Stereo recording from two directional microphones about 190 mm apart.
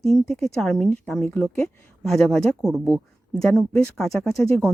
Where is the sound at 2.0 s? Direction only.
Centre (ahead or behind).